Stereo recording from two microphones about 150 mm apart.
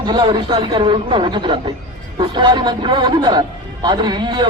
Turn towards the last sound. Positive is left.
turn(degrees=-30)  # may be behind; listen again after turning